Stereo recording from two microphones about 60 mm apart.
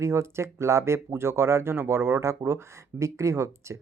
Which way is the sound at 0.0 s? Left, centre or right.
Right.